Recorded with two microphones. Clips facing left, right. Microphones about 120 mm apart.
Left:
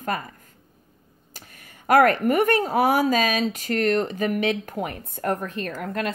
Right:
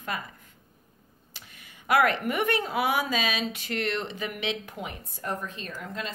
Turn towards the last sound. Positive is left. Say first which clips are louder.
# left 8 dB
turn(degrees=60)  # may be behind; listen again after turning